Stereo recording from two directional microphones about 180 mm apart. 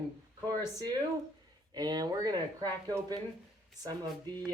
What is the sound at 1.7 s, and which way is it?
Speech, 20° right (ahead or behind).